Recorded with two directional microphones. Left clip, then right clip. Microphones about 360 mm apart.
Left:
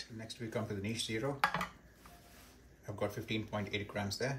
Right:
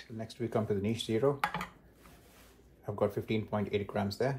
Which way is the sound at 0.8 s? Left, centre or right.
Centre.